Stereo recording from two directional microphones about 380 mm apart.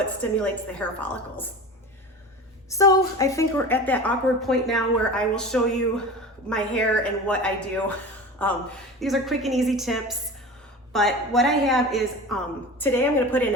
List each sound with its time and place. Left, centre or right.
0.2 s a woman's voice: centre
2.6 s a woman's voice: centre